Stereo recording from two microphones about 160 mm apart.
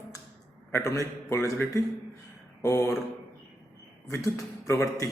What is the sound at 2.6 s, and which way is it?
Speech, 15° left (ahead or behind).